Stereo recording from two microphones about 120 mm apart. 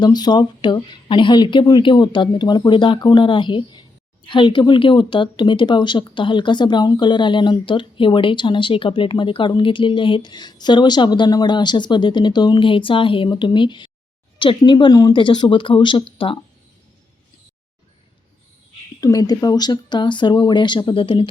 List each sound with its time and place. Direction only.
0.0 s speech: 35° left (ahead or behind)
18.9 s speech: 30° left (ahead or behind); by 21.2 s 45° left (ahead or behind)